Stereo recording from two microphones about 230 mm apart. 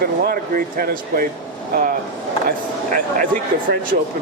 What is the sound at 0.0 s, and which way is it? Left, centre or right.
Speech, right.